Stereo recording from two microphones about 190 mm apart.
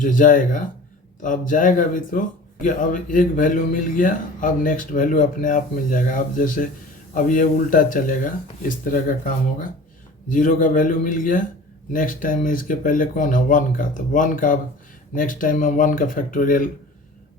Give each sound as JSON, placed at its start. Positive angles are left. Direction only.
{"t": 0.0, "sound": "speech", "side_deg": 45}